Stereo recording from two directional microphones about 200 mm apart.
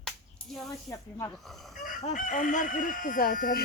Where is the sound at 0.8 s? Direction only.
15° left (ahead or behind).